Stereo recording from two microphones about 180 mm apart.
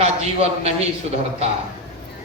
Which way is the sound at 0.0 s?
35° right (ahead or behind).